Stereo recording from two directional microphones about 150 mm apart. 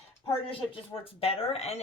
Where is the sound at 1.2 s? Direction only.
45° left (ahead or behind).